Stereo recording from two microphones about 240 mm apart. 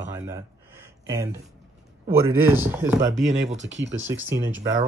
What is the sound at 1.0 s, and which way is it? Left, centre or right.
Speech, centre.